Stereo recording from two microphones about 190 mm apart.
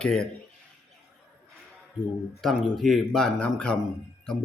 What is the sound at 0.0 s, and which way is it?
Speech, 5° left (ahead or behind).